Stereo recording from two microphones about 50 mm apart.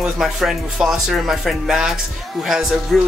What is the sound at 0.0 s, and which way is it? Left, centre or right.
Speech, centre.